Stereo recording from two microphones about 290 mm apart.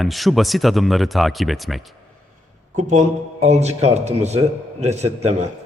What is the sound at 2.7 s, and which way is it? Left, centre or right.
A man's voice, right.